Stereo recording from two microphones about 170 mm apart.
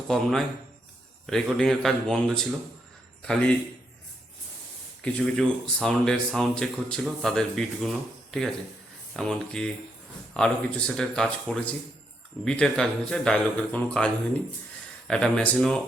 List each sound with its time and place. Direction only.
0.1 s speech: centre (ahead or behind)
5.0 s speech: 5° left (ahead or behind)